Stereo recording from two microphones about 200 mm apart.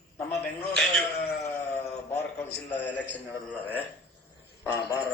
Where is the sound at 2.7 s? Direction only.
10° left (ahead or behind).